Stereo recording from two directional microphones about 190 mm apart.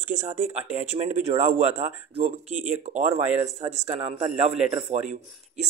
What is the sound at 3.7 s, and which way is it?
Speech, 15° right (ahead or behind).